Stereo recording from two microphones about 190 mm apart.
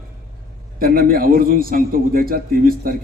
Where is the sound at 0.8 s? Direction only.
50° right (ahead or behind).